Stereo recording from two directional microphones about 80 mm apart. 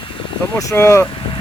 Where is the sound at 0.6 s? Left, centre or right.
Left.